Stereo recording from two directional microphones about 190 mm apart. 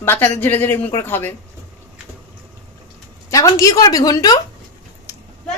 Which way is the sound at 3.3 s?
15° left (ahead or behind).